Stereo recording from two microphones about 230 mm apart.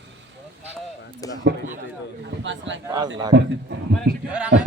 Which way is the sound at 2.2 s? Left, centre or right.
Right.